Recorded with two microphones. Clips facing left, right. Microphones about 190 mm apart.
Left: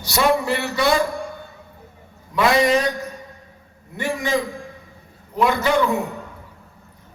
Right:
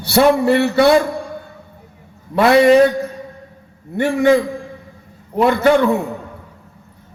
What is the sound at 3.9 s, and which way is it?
Speech, 60° right (ahead or behind).